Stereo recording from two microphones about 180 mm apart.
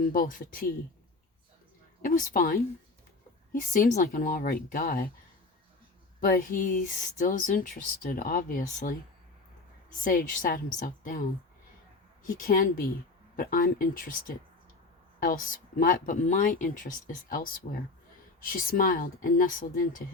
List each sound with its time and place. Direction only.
0.1 s speech: 50° left (ahead or behind)
2.0 s speech: 50° left (ahead or behind)
6.1 s speech: 50° left (ahead or behind)
10.0 s speech: 50° left (ahead or behind)
12.2 s speech: 50° left (ahead or behind)